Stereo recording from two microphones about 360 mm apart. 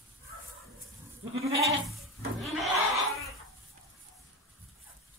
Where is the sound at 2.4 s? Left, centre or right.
Centre.